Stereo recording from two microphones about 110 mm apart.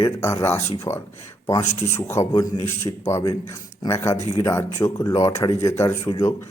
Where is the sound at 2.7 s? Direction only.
25° left (ahead or behind).